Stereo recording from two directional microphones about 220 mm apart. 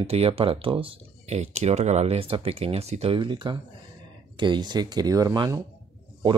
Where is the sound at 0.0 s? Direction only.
25° right (ahead or behind).